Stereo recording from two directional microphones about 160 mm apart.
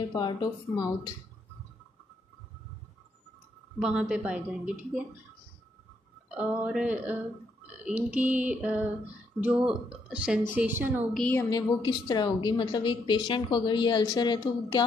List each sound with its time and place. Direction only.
0.1 s a woman's voice: 25° left (ahead or behind)
3.8 s a woman's voice: 5° right (ahead or behind)
6.3 s a woman's voice: 10° right (ahead or behind)
11.1 s a woman's voice: 10° left (ahead or behind)
11.5 s a woman's voice: 25° left (ahead or behind)